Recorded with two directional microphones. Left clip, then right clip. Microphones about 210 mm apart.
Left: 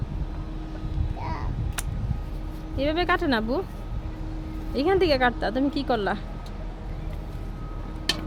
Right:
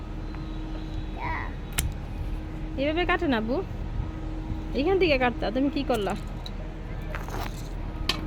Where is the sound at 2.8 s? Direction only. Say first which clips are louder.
Left 2 dB; 5° left (ahead or behind).